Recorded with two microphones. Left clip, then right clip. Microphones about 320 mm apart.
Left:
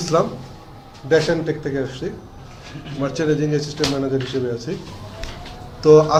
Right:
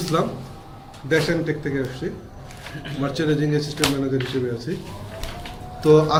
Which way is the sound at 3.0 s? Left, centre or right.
Centre.